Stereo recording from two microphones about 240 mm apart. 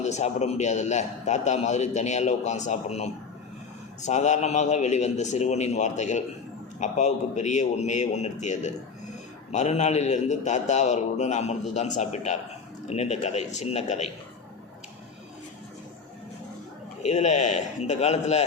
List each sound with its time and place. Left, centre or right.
0.0 s a man's voice: left
17.0 s a man's voice: left